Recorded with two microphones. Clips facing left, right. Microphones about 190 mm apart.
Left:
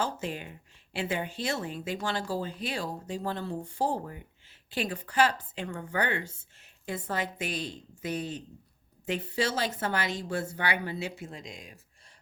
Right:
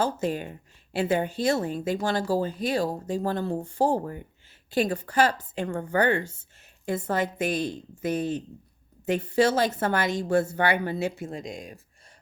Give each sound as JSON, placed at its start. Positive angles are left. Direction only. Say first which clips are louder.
{"t": 0.0, "sound": "speech", "louder": "right 6 dB", "side_deg": -40}